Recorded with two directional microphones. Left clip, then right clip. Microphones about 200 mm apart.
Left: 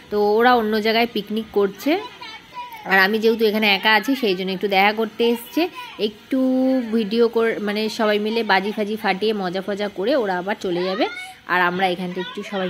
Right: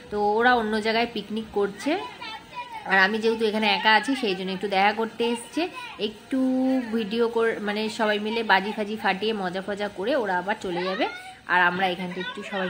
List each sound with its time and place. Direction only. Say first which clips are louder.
0.1 s a woman's voice: left 5 dB; 20° left (ahead or behind)